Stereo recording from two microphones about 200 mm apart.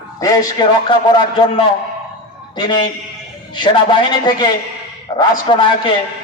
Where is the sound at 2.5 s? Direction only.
20° left (ahead or behind).